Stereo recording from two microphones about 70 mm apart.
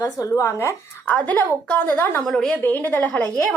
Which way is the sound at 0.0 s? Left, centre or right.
Left.